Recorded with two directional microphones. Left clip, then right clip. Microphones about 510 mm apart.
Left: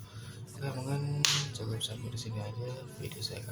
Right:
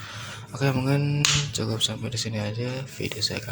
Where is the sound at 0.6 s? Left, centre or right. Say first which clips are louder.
Right 13 dB; left.